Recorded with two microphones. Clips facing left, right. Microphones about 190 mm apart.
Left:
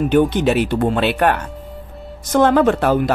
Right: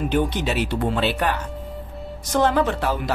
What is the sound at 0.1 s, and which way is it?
Speech, 55° left (ahead or behind).